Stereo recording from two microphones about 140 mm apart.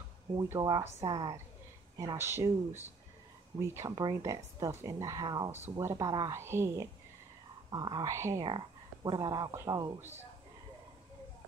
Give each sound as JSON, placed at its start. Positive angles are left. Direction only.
{"t": 0.4, "sound": "speech", "side_deg": -25}
{"t": 7.7, "sound": "speech", "side_deg": -30}
{"t": 8.5, "sound": "speech", "side_deg": -35}
{"t": 9.9, "sound": "speech", "side_deg": -15}